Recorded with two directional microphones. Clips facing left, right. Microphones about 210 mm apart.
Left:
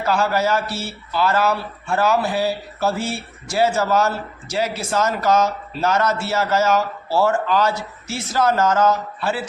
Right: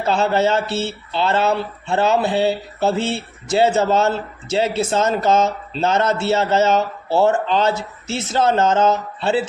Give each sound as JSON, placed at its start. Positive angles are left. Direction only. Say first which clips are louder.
{"t": 0.0, "sound": "speech", "louder": "right 2 dB", "side_deg": -25}